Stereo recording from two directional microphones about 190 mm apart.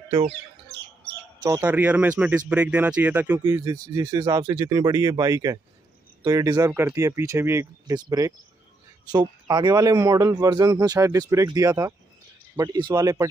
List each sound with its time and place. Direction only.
0.3 s bird: 60° right (ahead or behind)
1.6 s speech: 10° right (ahead or behind)
3.4 s a man's voice: 20° right (ahead or behind)